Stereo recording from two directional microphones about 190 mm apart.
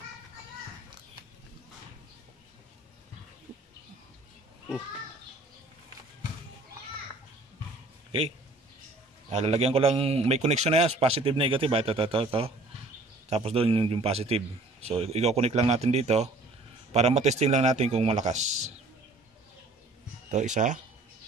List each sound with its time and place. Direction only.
9.3 s a man's voice: 35° right (ahead or behind)
20.2 s a man's voice: 40° right (ahead or behind)